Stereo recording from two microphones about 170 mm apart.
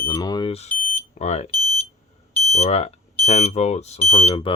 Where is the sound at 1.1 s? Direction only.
40° left (ahead or behind).